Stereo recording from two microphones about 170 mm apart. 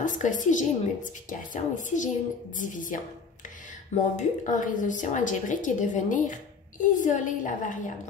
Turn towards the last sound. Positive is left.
turn(degrees=50)  # may be behind; listen again after turning